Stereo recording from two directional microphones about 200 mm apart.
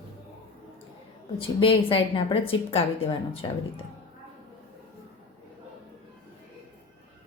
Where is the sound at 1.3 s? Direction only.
25° left (ahead or behind).